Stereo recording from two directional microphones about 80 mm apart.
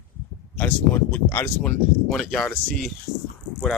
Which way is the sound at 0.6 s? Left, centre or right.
Left.